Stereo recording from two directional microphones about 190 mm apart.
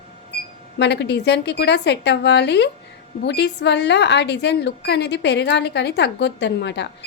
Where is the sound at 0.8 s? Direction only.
60° left (ahead or behind).